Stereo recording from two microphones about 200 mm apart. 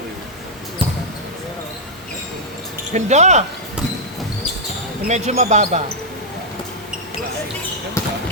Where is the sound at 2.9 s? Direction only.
35° right (ahead or behind).